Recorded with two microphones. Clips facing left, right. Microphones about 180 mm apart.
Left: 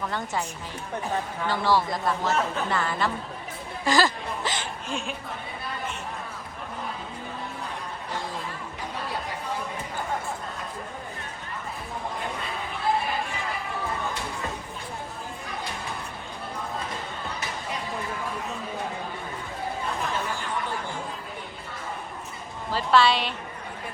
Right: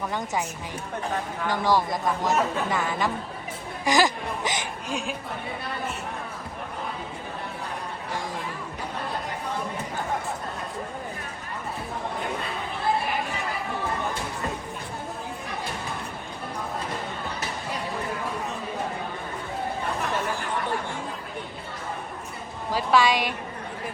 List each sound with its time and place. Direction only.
1.5 s speech: 15° right (ahead or behind)
22.7 s speech: 10° right (ahead or behind)